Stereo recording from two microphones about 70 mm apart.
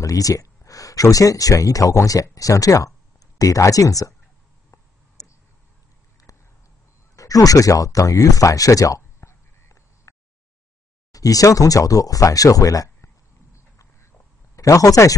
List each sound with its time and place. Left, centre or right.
0.0 s speech: left
4.6 s a sound: left
11.1 s speech: left
14.5 s speech: left